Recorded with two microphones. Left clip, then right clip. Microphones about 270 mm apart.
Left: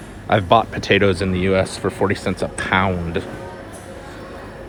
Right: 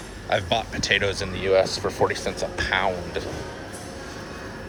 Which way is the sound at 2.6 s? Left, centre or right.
Centre.